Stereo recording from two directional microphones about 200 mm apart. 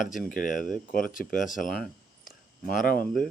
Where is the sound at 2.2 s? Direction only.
45° left (ahead or behind).